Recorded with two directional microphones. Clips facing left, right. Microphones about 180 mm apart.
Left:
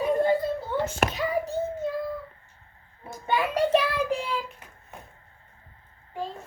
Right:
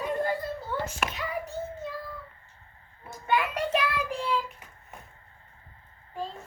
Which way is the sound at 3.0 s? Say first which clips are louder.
Left 1 dB; 30° left (ahead or behind).